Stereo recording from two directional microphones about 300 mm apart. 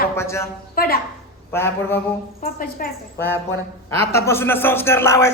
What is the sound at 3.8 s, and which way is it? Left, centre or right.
A man's voice, centre.